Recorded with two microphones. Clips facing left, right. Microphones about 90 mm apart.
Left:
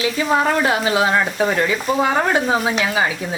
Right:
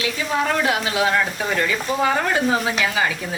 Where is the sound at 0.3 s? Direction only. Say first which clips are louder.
Left 3 dB; 40° left (ahead or behind).